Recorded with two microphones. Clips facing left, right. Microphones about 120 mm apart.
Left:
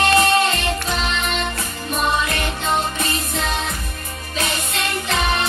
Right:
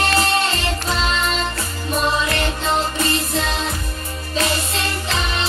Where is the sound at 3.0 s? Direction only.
35° right (ahead or behind).